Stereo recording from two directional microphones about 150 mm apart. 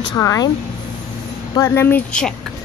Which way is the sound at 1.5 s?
15° left (ahead or behind).